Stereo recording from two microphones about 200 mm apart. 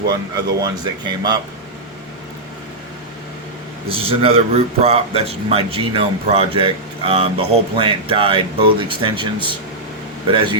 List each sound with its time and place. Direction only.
0.1 s speech: 20° right (ahead or behind)
3.8 s speech: 25° right (ahead or behind)